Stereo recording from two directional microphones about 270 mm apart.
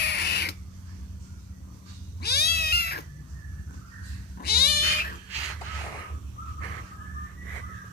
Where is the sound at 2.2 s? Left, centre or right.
Left.